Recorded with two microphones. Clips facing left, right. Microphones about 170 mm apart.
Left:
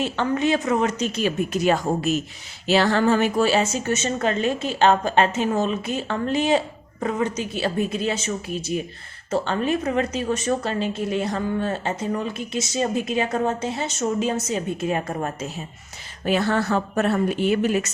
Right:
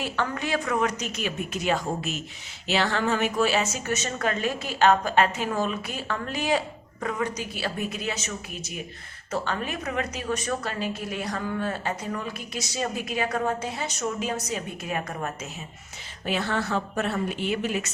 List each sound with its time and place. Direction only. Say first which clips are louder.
0.0 s a woman's voice: left 7 dB; 25° left (ahead or behind)
16.2 s speech: left 6 dB; 45° left (ahead or behind)